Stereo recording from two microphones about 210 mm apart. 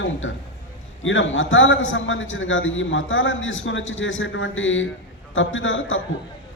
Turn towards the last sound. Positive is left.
turn(degrees=65)  # may be behind; listen again after turning